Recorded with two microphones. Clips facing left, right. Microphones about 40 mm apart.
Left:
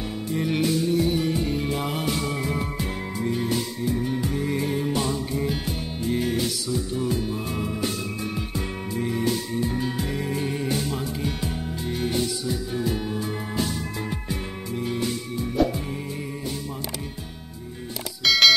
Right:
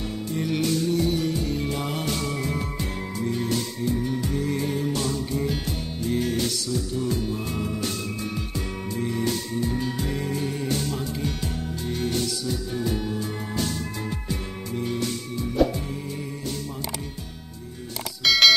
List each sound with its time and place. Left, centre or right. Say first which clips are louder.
0.3 s music: left 2 dB; centre
10.3 s music: left 3 dB; left
14.8 s music: even; centre
18.2 s music: even; centre